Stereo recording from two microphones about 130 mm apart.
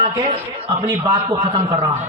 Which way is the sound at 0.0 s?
50° right (ahead or behind).